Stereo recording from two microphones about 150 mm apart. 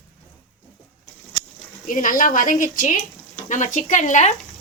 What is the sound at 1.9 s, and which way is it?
A woman's voice, 65° left (ahead or behind).